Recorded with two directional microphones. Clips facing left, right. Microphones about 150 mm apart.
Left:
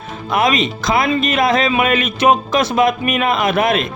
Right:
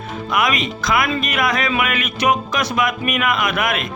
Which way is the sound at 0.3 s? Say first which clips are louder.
Left 4 dB; 25° left (ahead or behind).